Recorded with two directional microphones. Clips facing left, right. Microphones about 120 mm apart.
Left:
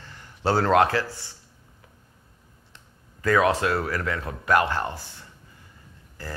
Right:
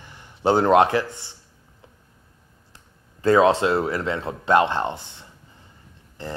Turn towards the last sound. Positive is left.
turn(degrees=-20)  # may be behind; listen again after turning